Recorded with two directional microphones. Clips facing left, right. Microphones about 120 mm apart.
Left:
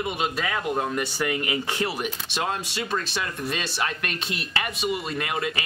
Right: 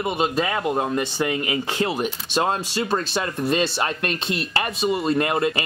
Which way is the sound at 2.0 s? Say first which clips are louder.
Right 6 dB; 35° right (ahead or behind).